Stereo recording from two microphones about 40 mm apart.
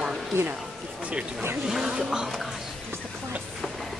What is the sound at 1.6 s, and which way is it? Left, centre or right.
Speech, centre.